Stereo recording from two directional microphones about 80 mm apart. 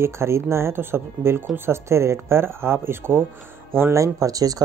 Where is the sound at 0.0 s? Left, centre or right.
Right.